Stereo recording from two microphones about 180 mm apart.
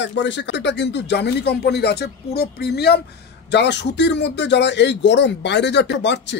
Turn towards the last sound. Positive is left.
turn(degrees=75)  # may be behind; listen again after turning